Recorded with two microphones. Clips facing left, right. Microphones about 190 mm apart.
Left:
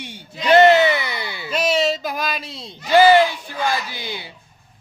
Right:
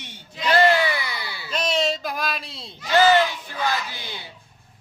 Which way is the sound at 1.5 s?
5° left (ahead or behind).